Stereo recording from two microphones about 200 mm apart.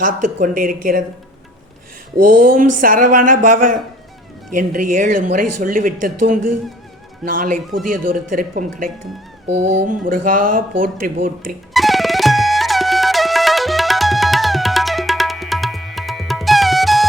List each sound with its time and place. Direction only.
0.0 s speech: 40° right (ahead or behind)
2.3 s speech: 40° right (ahead or behind)
11.7 s music: centre (ahead or behind)